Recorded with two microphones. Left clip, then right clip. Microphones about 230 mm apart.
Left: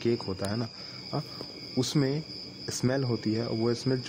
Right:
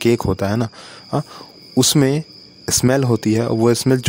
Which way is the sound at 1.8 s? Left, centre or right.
Right.